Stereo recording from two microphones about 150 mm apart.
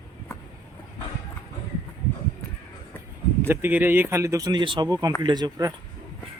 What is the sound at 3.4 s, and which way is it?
Speech, 15° right (ahead or behind).